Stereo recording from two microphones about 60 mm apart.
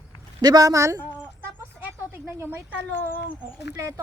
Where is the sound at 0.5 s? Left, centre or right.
Right.